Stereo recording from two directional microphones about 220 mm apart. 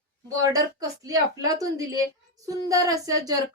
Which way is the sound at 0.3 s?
15° right (ahead or behind).